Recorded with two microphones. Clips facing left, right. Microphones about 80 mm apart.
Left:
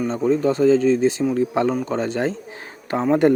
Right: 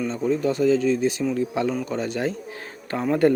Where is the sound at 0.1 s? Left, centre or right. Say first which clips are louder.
Left 6 dB; left.